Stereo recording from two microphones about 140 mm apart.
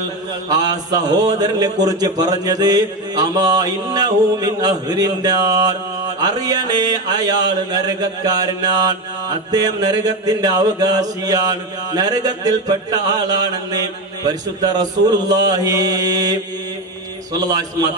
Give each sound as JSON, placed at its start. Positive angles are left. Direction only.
{"t": 0.5, "sound": "a man's voice", "side_deg": -25}